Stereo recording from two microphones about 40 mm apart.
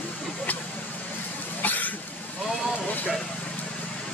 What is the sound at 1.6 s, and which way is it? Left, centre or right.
Cough, left.